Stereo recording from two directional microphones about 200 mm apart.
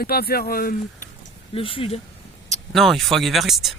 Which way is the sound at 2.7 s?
Centre (ahead or behind).